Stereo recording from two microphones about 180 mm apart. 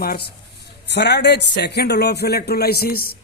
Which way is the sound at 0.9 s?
70° left (ahead or behind).